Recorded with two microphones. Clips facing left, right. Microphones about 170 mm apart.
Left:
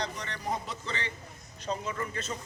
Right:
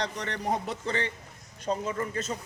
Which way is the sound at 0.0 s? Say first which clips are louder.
Right 4 dB; 65° right (ahead or behind).